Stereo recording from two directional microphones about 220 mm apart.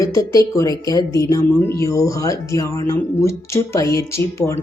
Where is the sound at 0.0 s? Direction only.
15° left (ahead or behind).